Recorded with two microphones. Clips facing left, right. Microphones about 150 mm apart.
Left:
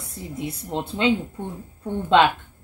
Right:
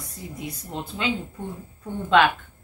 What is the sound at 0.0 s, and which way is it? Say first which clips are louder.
Speech: left 4 dB; 25° left (ahead or behind).